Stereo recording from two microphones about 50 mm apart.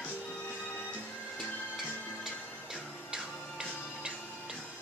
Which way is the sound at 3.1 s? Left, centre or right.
Centre.